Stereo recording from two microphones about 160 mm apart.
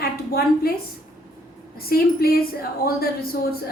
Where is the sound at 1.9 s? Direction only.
70° left (ahead or behind).